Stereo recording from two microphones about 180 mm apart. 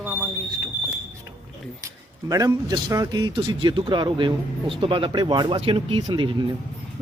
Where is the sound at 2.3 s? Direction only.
20° right (ahead or behind).